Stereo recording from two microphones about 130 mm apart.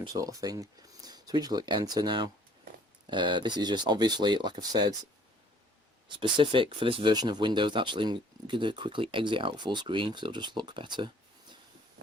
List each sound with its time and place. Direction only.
0.0 s speech: 25° right (ahead or behind)
6.1 s speech: 40° right (ahead or behind)